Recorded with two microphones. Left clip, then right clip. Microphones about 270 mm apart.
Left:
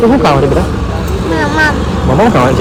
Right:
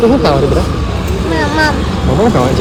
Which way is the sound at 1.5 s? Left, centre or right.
Right.